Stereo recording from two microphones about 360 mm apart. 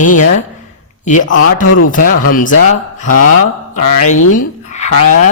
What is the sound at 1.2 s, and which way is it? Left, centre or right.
Speech, left.